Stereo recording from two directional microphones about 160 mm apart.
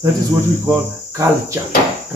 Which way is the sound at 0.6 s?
20° right (ahead or behind).